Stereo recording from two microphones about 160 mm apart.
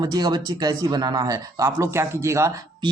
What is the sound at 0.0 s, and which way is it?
Speech, 25° right (ahead or behind).